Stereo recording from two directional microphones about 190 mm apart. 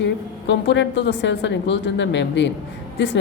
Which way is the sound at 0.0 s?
70° left (ahead or behind).